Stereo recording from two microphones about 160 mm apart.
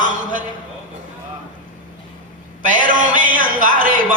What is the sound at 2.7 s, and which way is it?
Music, 55° right (ahead or behind).